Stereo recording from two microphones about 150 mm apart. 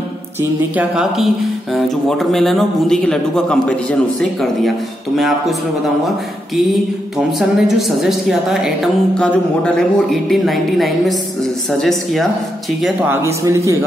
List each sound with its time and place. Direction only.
0.4 s a woman's voice: 10° right (ahead or behind)
13.1 s a man's voice: 20° right (ahead or behind)